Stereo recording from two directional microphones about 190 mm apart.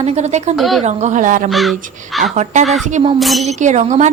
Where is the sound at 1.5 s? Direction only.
Centre (ahead or behind).